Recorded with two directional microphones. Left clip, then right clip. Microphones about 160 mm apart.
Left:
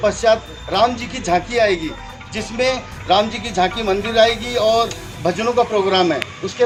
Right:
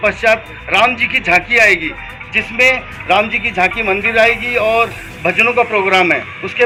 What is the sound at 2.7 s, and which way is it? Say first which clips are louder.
Speech: right 3 dB; 10° right (ahead or behind).